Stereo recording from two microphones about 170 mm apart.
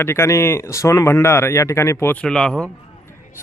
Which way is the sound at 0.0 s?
15° left (ahead or behind).